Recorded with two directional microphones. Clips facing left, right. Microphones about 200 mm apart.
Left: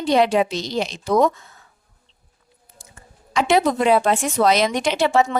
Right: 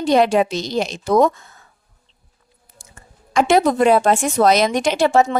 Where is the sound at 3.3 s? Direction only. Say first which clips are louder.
Right 3 dB; 45° right (ahead or behind).